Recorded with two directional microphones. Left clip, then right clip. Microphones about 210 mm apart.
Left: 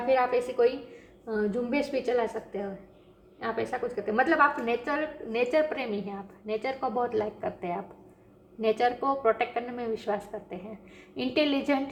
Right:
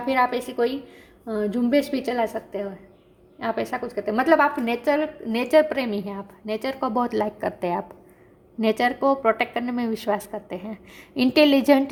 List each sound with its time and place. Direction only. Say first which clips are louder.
0.1 s a woman's voice: right 3 dB; 55° right (ahead or behind)